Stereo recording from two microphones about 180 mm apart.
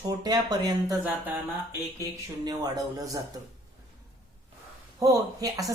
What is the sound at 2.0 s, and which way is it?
Speech, 20° right (ahead or behind).